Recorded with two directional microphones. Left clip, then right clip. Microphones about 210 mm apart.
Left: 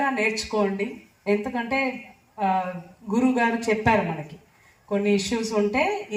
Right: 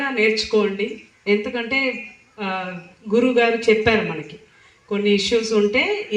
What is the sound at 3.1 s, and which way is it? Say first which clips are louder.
Speech: right 6 dB; 60° left (ahead or behind).